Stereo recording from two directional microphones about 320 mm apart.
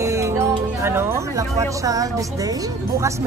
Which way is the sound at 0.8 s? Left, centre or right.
Centre.